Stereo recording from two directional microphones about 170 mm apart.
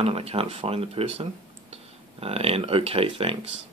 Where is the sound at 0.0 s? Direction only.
35° right (ahead or behind).